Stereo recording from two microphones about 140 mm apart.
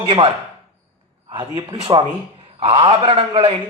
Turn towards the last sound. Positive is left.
turn(degrees=-45)  # may be behind; listen again after turning